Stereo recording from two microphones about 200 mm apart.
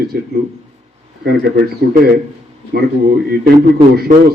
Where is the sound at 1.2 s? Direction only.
55° right (ahead or behind).